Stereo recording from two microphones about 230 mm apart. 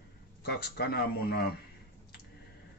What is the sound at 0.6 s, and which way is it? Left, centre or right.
Speech, left.